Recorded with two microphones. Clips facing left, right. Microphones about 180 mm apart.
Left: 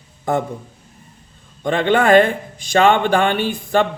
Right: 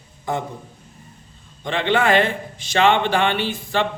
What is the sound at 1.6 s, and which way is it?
A man's voice, 50° left (ahead or behind).